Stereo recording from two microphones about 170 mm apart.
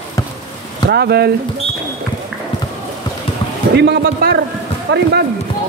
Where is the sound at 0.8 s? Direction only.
70° right (ahead or behind).